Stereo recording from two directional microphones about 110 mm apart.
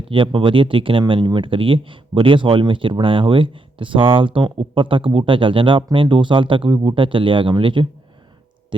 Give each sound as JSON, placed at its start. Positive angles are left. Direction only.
{"t": 0.0, "sound": "speech", "side_deg": -50}